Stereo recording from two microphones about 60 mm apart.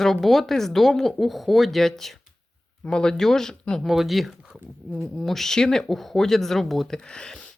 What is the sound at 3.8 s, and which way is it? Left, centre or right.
Speech, centre.